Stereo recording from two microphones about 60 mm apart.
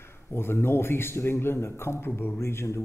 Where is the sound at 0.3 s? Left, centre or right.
Left.